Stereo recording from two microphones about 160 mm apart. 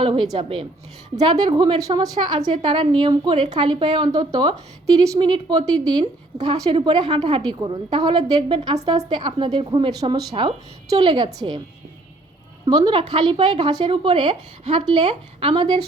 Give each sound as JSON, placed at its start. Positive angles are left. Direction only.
{"t": 0.0, "sound": "a woman's voice", "side_deg": -30}
{"t": 12.6, "sound": "a woman's voice", "side_deg": -30}